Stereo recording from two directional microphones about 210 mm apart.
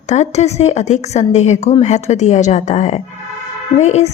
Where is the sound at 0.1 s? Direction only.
30° left (ahead or behind).